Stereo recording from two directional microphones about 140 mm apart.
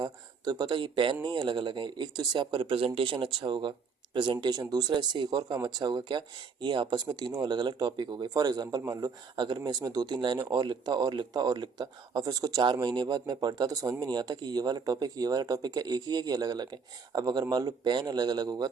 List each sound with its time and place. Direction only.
0.0 s speech: 30° right (ahead or behind)